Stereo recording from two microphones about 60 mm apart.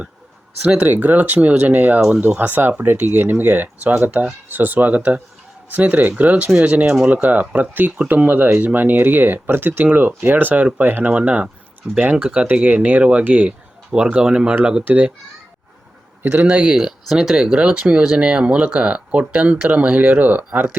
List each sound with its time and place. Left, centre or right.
0.8 s speech: right
12.6 s speech: right; by 14.8 s centre
16.2 s speech: right
16.6 s speech: centre; by 20.7 s right